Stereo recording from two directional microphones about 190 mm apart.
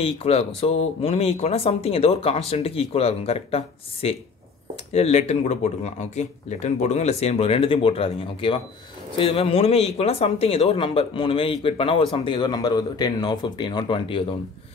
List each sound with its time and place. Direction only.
0.0 s speech: 30° left (ahead or behind)